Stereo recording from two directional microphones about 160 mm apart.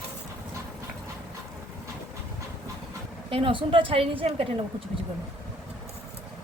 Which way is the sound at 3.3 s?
30° right (ahead or behind).